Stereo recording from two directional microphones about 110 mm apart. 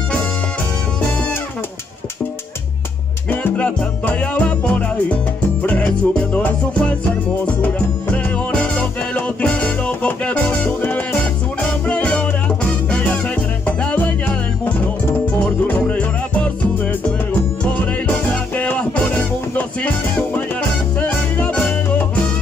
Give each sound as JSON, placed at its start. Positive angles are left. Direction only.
{"t": 3.3, "sound": "music", "side_deg": 15}
{"t": 13.7, "sound": "music", "side_deg": 15}
{"t": 18.0, "sound": "music", "side_deg": 15}